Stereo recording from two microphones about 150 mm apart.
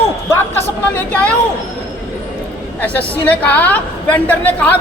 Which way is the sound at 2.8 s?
10° left (ahead or behind).